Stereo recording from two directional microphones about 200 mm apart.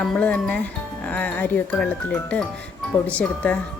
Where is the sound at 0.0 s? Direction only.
5° left (ahead or behind).